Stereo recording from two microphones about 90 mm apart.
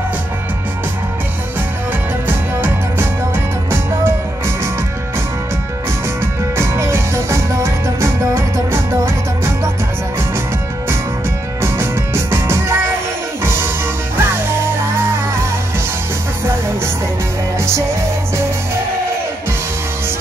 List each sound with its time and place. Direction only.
2.2 s music: 25° right (ahead or behind)
6.5 s music: 30° right (ahead or behind)
11.6 s music: 25° right (ahead or behind)
16.4 s music: 25° right (ahead or behind)